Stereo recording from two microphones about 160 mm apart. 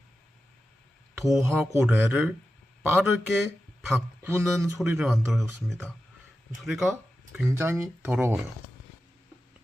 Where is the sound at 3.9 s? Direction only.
15° right (ahead or behind).